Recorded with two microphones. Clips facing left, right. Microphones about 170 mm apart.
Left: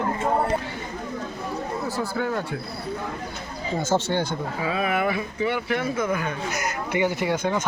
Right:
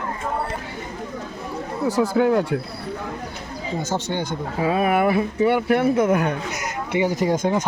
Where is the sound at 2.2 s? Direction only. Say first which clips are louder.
Right 10 dB; 70° right (ahead or behind).